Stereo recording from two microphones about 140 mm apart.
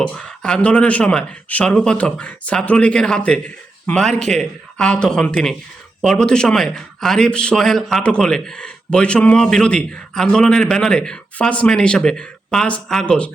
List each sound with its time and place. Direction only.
0.0 s speech: 5° left (ahead or behind)